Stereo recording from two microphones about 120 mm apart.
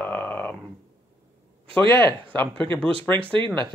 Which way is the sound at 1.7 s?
20° left (ahead or behind).